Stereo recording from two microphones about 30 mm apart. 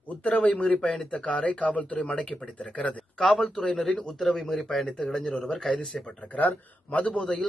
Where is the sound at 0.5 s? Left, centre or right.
Left.